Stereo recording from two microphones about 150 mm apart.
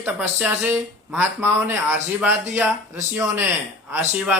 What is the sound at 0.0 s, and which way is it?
Speech, 10° right (ahead or behind).